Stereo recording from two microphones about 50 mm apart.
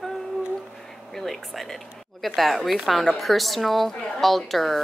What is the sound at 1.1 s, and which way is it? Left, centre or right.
Speech, centre.